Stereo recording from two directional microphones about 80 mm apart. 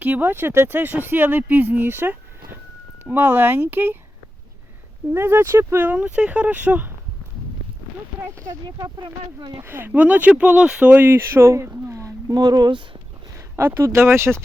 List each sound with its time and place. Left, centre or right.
0.0 s speech: right
5.1 s speech: right
9.6 s speech: right
12.3 s speech: right
13.6 s speech: right